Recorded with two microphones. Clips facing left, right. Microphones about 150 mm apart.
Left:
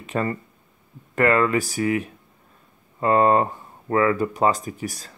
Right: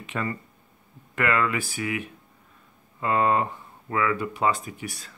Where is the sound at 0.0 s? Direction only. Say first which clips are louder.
Left 5 dB; 40° left (ahead or behind).